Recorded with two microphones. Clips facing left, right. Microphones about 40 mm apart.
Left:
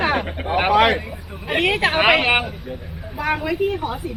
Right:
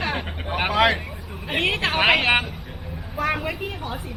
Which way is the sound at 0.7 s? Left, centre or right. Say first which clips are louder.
Left 4 dB; left.